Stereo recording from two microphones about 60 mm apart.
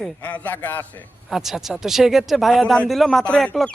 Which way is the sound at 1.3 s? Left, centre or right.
Centre.